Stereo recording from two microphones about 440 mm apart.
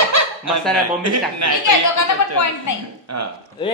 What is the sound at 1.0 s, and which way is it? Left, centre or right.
Speech, right.